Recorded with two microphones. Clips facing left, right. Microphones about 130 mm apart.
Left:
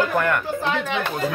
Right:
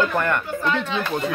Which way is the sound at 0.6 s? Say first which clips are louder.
Right 2 dB; 70° left (ahead or behind).